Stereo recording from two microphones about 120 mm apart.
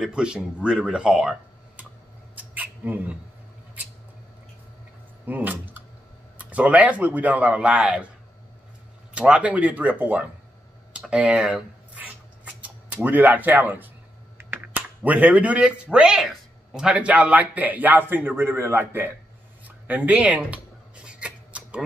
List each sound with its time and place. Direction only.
0.0 s a man's voice: 5° right (ahead or behind)
2.3 s a sound: 15° right (ahead or behind)
5.2 s a man's voice: 15° right (ahead or behind)
9.1 s a man's voice: 10° right (ahead or behind)
10.9 s writing: 10° right (ahead or behind)
14.4 s a man's voice: 15° right (ahead or behind)
19.9 s scissors: 10° right (ahead or behind)